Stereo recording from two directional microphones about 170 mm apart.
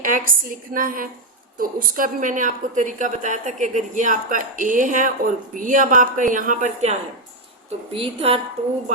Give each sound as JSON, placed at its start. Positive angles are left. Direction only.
{"t": 0.0, "sound": "a woman's voice", "side_deg": -55}
{"t": 7.9, "sound": "a woman's voice", "side_deg": -35}